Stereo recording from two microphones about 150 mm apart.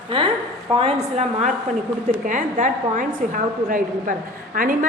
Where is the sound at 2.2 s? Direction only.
60° right (ahead or behind).